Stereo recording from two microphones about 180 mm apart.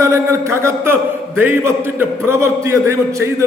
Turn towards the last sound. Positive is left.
turn(degrees=-15)  # may be behind; listen again after turning